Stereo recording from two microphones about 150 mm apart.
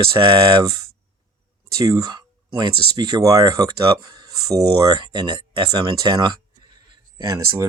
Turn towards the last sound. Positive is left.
turn(degrees=-25)  # may be behind; listen again after turning